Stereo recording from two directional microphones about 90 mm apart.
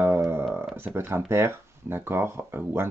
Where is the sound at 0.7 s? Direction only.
25° right (ahead or behind).